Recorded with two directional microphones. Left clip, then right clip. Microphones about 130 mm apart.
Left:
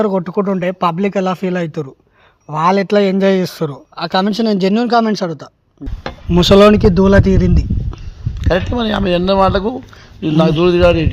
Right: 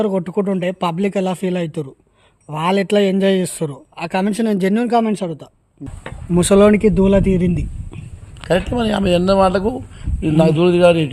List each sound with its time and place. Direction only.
0.2 s a man's voice: 10° right (ahead or behind)
8.4 s speech: 30° right (ahead or behind)